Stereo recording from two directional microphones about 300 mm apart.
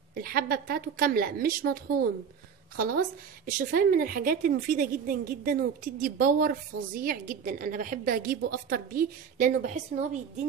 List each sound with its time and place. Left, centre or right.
0.1 s a woman's voice: right